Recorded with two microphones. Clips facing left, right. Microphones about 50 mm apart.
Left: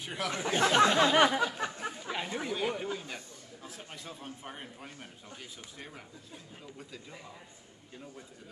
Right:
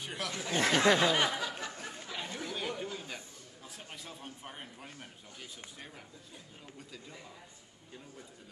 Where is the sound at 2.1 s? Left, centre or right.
Left.